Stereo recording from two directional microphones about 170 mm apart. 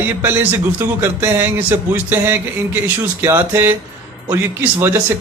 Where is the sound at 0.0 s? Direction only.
10° right (ahead or behind).